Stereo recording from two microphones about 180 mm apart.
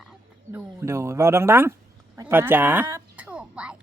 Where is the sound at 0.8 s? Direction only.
15° right (ahead or behind).